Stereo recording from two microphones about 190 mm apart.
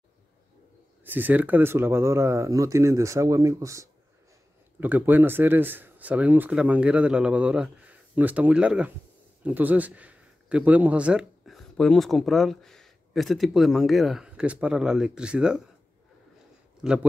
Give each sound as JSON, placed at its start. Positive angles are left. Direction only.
{"t": 1.0, "sound": "speech", "side_deg": -10}
{"t": 16.8, "sound": "a man's voice", "side_deg": -5}